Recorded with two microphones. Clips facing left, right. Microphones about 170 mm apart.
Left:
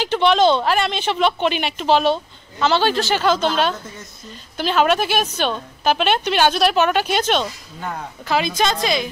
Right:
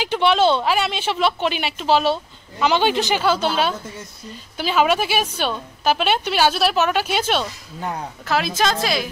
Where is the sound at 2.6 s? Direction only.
15° right (ahead or behind).